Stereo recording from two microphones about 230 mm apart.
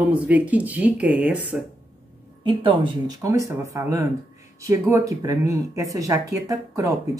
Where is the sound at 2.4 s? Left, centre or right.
Right.